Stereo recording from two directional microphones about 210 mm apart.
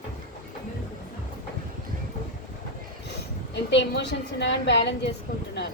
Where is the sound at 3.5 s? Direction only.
55° left (ahead or behind).